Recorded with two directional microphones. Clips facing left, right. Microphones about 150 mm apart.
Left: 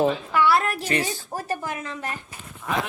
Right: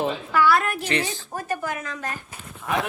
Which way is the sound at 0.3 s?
25° left (ahead or behind).